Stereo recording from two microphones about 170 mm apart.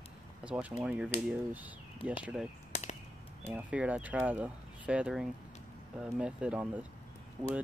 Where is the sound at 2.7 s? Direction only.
40° left (ahead or behind).